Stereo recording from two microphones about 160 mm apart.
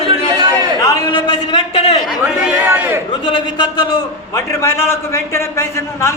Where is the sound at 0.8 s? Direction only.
25° left (ahead or behind); by 2.0 s 40° left (ahead or behind).